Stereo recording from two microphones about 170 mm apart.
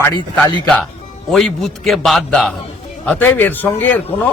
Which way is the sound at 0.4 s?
20° left (ahead or behind).